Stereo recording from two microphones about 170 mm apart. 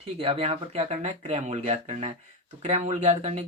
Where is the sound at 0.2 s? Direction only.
35° right (ahead or behind).